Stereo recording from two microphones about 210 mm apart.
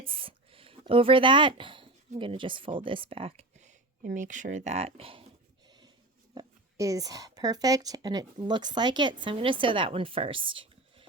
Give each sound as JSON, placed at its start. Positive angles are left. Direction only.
{"t": 0.0, "sound": "speech", "side_deg": -25}
{"t": 5.6, "sound": "a sound", "side_deg": -20}
{"t": 6.3, "sound": "speech", "side_deg": -15}